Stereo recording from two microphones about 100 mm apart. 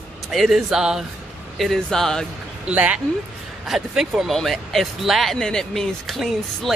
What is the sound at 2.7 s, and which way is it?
Speech, 15° right (ahead or behind).